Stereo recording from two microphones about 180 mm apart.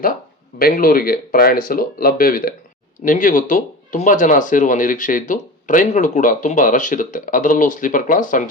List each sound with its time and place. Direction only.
0.6 s speech: 50° left (ahead or behind)